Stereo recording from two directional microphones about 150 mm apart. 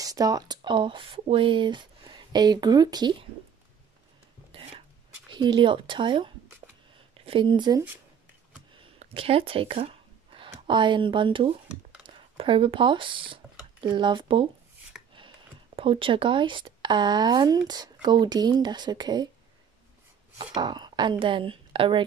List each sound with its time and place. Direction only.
0.0 s speech: 25° right (ahead or behind)
5.3 s speech: 30° right (ahead or behind)
9.0 s a sound: 40° right (ahead or behind)
10.7 s speech: 30° right (ahead or behind)
20.3 s a woman's voice: 30° right (ahead or behind)